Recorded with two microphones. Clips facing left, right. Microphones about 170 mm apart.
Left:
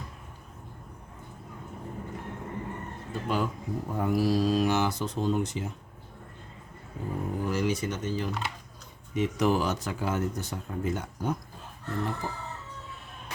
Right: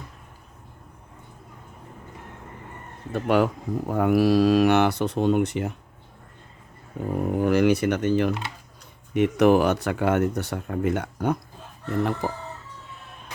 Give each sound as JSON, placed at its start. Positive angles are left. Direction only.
{"t": 3.1, "sound": "speech", "side_deg": -70}
{"t": 7.2, "sound": "a sound", "side_deg": -65}
{"t": 9.1, "sound": "speech", "side_deg": -65}